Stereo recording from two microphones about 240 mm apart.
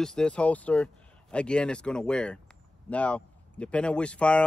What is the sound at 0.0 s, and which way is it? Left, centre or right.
Speech, centre.